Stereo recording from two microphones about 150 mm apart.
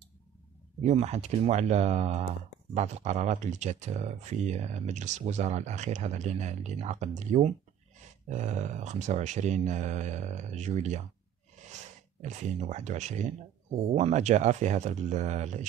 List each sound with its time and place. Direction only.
0.8 s speech: 45° right (ahead or behind)